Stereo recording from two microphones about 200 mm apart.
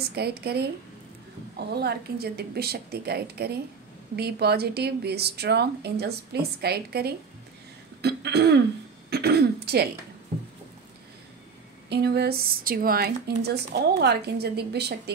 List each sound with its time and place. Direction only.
0.1 s a woman's voice: 55° right (ahead or behind)
11.9 s a woman's voice: 55° right (ahead or behind)